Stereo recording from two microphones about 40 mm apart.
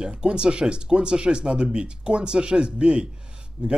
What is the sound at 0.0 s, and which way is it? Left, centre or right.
Speech, right.